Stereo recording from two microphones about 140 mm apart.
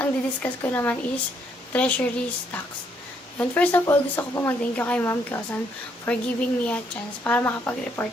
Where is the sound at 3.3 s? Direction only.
15° left (ahead or behind).